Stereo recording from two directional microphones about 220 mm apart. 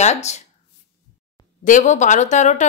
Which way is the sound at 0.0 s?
30° left (ahead or behind).